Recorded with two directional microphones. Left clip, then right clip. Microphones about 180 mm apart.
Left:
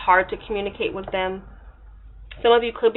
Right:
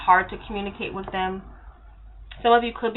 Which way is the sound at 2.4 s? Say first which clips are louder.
Left 2 dB; 40° left (ahead or behind).